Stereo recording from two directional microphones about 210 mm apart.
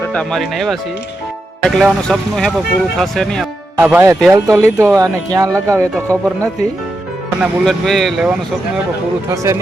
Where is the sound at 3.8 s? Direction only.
10° right (ahead or behind).